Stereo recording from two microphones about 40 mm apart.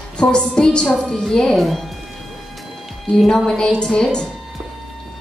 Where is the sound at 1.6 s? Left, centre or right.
Centre.